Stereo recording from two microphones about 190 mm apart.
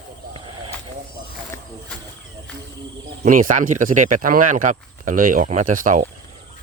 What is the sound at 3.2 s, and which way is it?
Speech, 45° right (ahead or behind).